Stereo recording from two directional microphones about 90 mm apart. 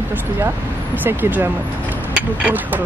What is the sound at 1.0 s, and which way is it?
Speech, 20° right (ahead or behind).